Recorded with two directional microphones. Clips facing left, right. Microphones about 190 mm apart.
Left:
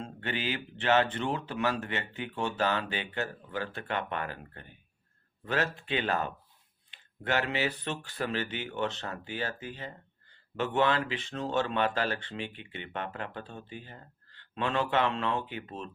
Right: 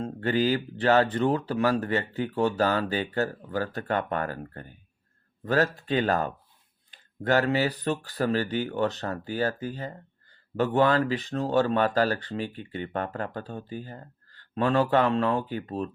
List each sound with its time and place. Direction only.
0.0 s speech: 40° right (ahead or behind)